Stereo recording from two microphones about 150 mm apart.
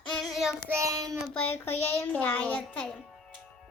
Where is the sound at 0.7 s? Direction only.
20° right (ahead or behind).